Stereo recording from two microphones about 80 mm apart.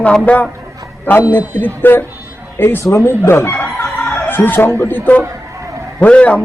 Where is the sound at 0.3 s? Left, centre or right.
Centre.